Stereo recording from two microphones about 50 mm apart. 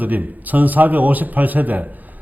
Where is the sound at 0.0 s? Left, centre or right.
Right.